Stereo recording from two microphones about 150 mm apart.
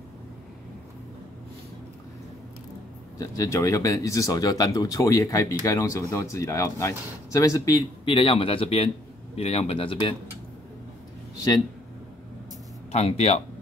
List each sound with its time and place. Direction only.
3.2 s speech: 20° left (ahead or behind)
8.0 s speech: 35° left (ahead or behind)
11.3 s speech: 20° left (ahead or behind)
12.9 s speech: 45° left (ahead or behind)